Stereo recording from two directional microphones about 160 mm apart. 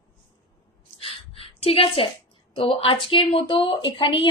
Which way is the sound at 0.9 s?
35° left (ahead or behind).